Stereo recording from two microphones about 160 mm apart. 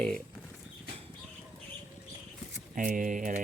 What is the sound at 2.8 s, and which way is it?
Speech, 55° right (ahead or behind).